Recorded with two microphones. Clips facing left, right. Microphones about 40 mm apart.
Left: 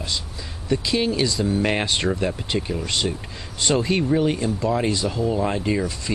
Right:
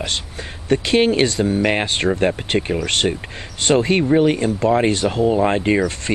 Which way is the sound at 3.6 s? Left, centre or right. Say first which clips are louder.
Right 5 dB; right.